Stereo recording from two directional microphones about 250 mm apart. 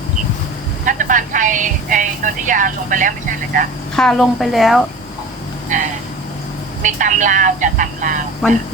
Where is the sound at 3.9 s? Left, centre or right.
Centre.